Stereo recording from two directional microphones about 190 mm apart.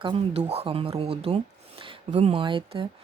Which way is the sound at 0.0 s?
30° right (ahead or behind).